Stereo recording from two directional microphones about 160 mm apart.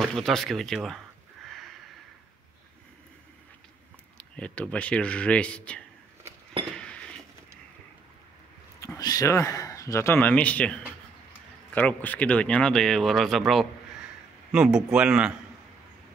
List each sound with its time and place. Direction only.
0.0 s a sound: centre (ahead or behind)
4.2 s speech: 10° left (ahead or behind)
6.8 s chink: 5° left (ahead or behind)
8.7 s speech: 20° left (ahead or behind); by 15.3 s 5° right (ahead or behind)